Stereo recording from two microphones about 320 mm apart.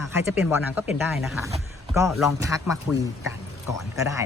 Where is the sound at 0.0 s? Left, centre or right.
Centre.